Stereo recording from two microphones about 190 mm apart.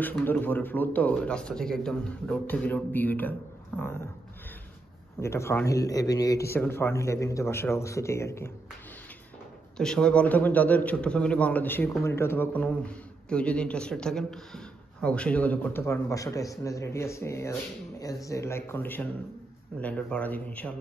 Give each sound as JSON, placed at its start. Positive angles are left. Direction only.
{"t": 0.0, "sound": "a man's voice", "side_deg": 10}
{"t": 5.2, "sound": "a man's voice", "side_deg": 15}
{"t": 9.8, "sound": "a man's voice", "side_deg": 5}